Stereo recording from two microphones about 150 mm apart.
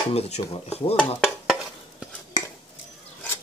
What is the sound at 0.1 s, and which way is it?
Speech, 40° left (ahead or behind).